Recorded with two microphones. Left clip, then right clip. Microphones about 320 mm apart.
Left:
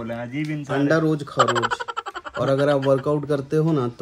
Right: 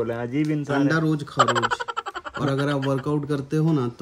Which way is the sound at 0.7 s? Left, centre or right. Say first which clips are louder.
Left 4 dB; centre.